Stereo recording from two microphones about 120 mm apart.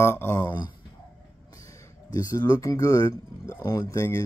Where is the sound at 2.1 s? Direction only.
35° left (ahead or behind).